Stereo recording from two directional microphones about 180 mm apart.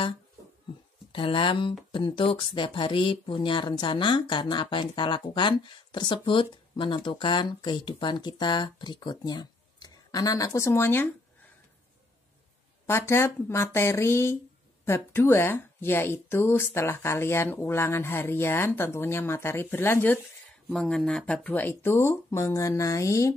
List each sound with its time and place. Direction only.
1.1 s speech: 30° left (ahead or behind); by 11.1 s 15° left (ahead or behind)
12.8 s a woman's voice: 15° left (ahead or behind)
20.6 s a woman's voice: centre (ahead or behind)